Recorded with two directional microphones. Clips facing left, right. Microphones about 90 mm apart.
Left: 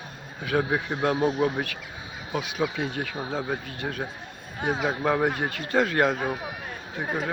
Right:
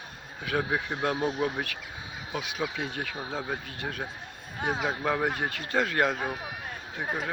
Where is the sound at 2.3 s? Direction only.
65° left (ahead or behind).